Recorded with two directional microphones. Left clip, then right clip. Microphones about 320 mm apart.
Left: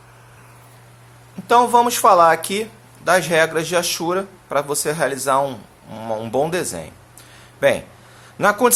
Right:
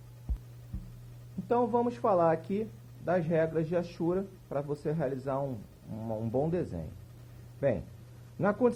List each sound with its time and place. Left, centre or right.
1.5 s speech: centre
6.1 s speech: left
8.4 s speech: centre